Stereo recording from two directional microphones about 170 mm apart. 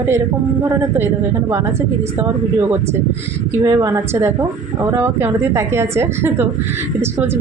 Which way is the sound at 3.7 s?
20° right (ahead or behind).